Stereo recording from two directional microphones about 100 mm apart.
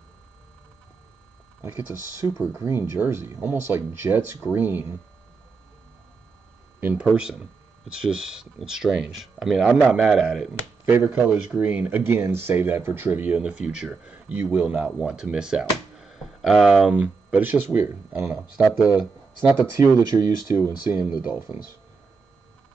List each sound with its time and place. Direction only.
1.6 s speech: 25° right (ahead or behind)
6.8 s speech: 15° right (ahead or behind)
11.1 s speech: 15° right (ahead or behind)
16.8 s speech: 15° right (ahead or behind)
18.3 s speech: 15° right (ahead or behind)
19.5 s speech: 30° right (ahead or behind)
21.2 s speech: 15° right (ahead or behind)